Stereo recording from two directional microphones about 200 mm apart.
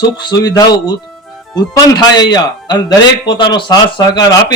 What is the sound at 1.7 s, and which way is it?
A man's voice, 20° left (ahead or behind).